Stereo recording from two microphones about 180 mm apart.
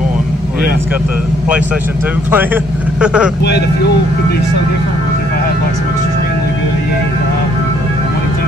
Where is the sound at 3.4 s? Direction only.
65° left (ahead or behind).